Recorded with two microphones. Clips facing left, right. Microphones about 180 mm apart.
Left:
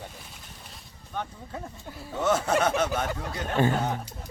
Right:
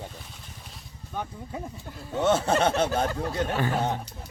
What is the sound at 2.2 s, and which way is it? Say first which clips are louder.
Speech: right 2 dB; 30° right (ahead or behind).